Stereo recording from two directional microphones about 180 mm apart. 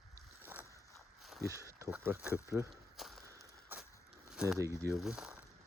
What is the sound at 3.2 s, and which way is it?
Walk, 20° right (ahead or behind).